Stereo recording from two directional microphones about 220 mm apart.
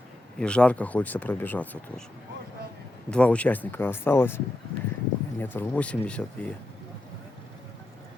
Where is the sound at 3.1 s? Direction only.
5° left (ahead or behind).